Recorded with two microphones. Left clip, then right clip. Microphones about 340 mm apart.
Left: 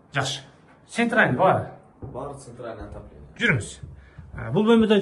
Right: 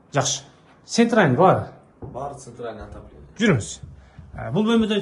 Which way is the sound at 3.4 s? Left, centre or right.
Centre.